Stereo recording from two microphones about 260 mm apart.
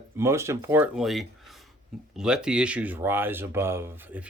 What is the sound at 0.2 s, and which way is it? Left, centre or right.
Speech, centre.